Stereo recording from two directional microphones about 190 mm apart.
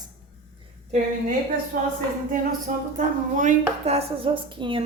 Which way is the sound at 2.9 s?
40° right (ahead or behind).